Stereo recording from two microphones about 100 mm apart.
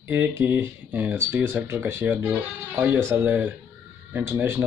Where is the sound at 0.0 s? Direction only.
20° right (ahead or behind).